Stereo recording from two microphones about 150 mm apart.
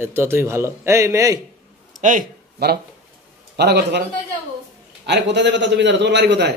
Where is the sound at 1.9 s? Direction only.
60° right (ahead or behind).